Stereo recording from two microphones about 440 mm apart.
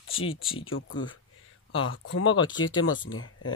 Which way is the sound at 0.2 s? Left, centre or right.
Centre.